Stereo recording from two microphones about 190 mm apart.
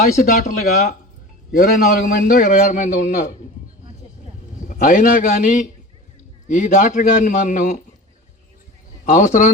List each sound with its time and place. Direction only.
0.2 s a man's voice: 50° left (ahead or behind)
4.7 s a man's voice: 45° left (ahead or behind)
9.0 s a man's voice: 40° left (ahead or behind)